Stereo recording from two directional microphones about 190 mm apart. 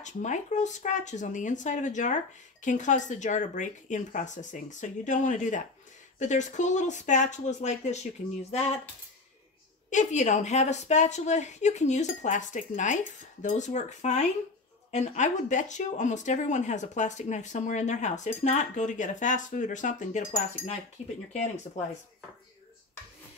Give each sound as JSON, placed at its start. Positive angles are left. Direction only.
{"t": 0.0, "sound": "speech", "side_deg": 40}
{"t": 9.8, "sound": "speech", "side_deg": 40}